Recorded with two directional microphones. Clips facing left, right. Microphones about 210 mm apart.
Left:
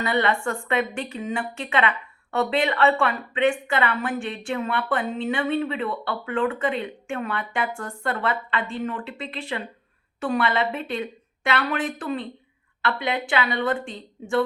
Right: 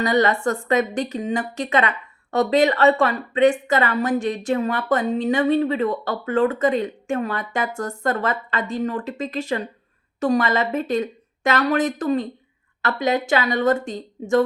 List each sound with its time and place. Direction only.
0.0 s a woman's voice: 40° right (ahead or behind)